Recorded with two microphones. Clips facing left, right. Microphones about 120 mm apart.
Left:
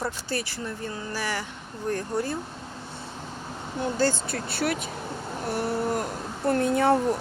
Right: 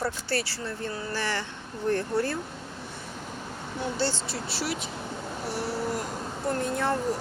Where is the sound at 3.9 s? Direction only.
45° left (ahead or behind).